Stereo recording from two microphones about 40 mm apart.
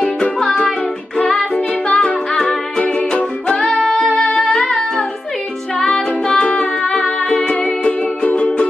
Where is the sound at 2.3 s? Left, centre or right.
Centre.